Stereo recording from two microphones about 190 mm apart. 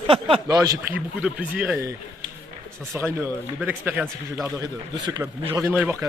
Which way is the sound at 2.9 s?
10° right (ahead or behind).